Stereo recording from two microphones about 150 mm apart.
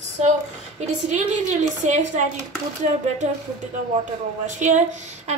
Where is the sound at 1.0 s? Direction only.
50° right (ahead or behind).